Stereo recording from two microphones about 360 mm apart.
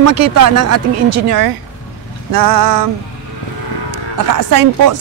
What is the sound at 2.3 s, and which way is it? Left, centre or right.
Speech, right.